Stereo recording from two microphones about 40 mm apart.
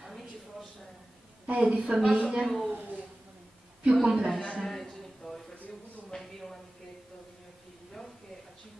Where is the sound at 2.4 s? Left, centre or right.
Centre.